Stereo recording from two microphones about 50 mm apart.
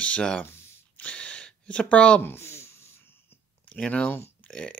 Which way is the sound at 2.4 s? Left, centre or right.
Left.